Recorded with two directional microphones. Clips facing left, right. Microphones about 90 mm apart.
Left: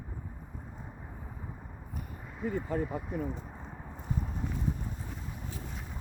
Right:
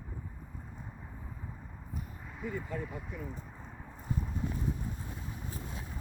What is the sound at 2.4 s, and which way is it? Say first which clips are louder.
Speech: left 6 dB; 40° left (ahead or behind).